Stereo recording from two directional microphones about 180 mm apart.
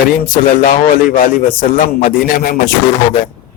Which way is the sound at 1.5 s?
50° left (ahead or behind).